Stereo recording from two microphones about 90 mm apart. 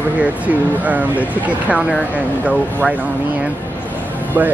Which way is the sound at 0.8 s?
15° right (ahead or behind).